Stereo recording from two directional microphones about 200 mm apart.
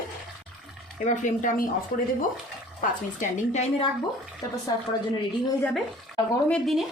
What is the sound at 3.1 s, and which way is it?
Speech, 35° left (ahead or behind).